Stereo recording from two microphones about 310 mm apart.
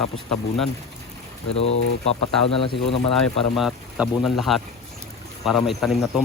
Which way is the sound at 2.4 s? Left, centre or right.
Centre.